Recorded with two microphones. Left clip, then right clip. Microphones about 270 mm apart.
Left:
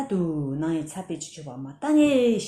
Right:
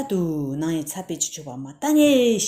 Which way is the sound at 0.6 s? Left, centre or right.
Right.